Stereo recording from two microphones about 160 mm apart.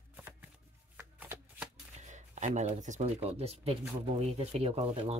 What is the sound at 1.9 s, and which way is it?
Speech, 45° right (ahead or behind).